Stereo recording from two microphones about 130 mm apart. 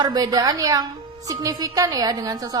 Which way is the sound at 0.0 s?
30° right (ahead or behind).